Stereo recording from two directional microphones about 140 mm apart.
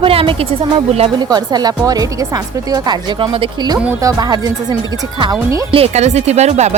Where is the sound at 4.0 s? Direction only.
25° right (ahead or behind).